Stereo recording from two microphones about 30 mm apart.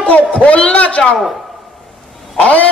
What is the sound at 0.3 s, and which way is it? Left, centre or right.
Speech, left.